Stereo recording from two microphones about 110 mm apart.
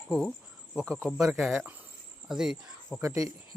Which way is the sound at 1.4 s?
5° right (ahead or behind).